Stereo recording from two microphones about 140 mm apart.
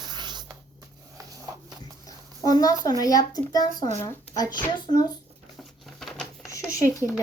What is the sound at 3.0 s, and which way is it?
A woman's voice, 25° left (ahead or behind).